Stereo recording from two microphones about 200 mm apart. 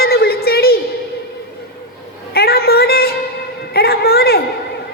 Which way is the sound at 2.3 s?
50° left (ahead or behind).